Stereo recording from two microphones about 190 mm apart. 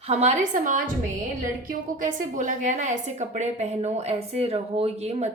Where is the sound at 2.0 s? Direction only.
40° right (ahead or behind).